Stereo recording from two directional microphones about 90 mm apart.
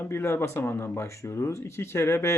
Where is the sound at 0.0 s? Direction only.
25° left (ahead or behind).